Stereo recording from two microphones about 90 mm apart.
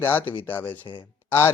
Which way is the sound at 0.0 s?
25° left (ahead or behind).